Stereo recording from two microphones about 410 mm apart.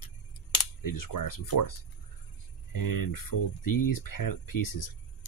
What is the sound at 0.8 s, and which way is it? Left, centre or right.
Speech, left.